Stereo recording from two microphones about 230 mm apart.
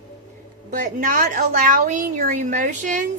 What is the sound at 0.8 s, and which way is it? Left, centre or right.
A woman's voice, right.